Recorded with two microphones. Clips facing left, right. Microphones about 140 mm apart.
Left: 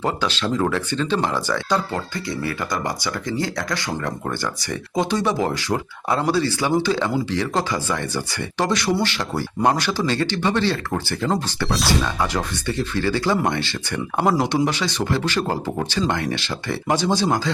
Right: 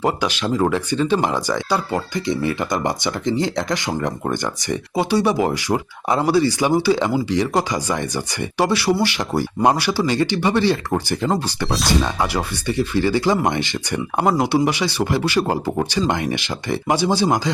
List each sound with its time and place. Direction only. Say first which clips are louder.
0.0 s speech: right 2 dB; 15° right (ahead or behind)
14.3 s speech: right 2 dB; 5° right (ahead or behind)